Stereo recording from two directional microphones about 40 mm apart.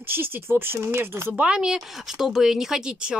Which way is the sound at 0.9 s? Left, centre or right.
Right.